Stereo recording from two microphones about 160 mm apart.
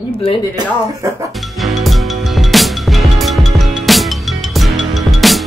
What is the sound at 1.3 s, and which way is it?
Music, centre (ahead or behind).